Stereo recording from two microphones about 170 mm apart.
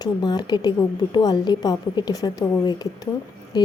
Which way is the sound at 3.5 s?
25° left (ahead or behind).